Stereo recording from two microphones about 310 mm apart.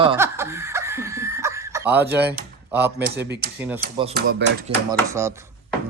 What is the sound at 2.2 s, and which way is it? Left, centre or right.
Speech, right.